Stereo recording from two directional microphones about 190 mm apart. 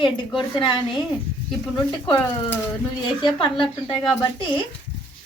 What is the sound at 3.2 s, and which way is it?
A woman's voice, 25° left (ahead or behind).